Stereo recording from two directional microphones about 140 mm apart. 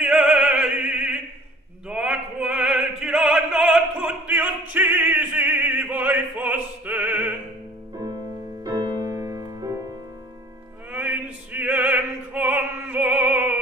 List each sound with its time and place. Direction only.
0.0 s opera: 5° right (ahead or behind)
8.6 s music: 25° right (ahead or behind)
10.9 s opera: 10° right (ahead or behind)